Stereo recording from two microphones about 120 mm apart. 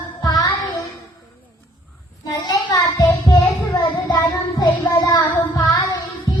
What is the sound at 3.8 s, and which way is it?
Child singing, 40° left (ahead or behind).